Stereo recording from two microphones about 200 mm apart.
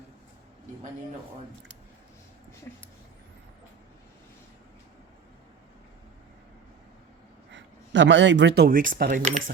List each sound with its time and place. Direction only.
2.7 s speech: 10° left (ahead or behind)
7.5 s speech: 65° right (ahead or behind); by 9.4 s 35° right (ahead or behind)